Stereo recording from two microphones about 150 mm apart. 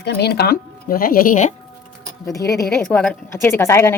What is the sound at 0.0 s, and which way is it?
Speech, 90° left.